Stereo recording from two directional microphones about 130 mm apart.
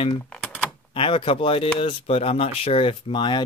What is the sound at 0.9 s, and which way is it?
Speech, 45° left (ahead or behind).